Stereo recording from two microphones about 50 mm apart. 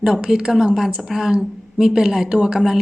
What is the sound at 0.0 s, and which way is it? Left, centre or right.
A woman's voice, centre.